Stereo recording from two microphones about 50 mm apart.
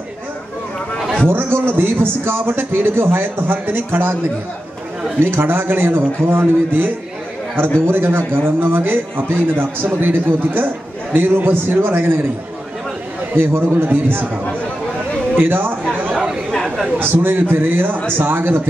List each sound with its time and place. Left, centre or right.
1.3 s a man's voice: right
5.2 s a man's voice: right
13.4 s a man's voice: right
15.3 s a sound: right
16.5 s chatter: centre
17.0 s a man's voice: right